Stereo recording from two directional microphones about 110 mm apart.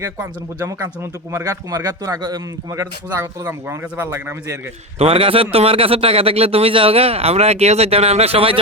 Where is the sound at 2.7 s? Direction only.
25° right (ahead or behind).